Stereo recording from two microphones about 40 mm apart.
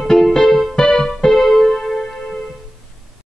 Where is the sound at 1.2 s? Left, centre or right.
Centre.